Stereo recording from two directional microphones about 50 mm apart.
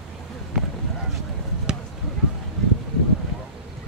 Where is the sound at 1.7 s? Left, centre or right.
Centre.